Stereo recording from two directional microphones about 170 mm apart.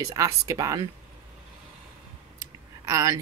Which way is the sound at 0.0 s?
20° right (ahead or behind).